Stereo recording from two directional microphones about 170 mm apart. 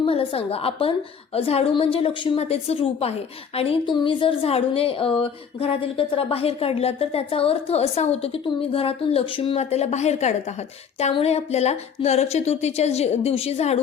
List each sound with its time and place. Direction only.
0.0 s a woman's voice: 30° left (ahead or behind)